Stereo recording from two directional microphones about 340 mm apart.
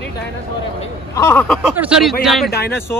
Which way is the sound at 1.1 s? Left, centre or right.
Centre.